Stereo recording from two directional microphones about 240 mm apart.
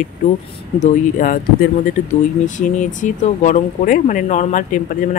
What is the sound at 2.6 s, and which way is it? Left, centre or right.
Speech, left.